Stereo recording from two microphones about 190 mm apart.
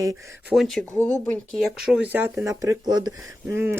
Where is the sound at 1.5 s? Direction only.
Centre (ahead or behind).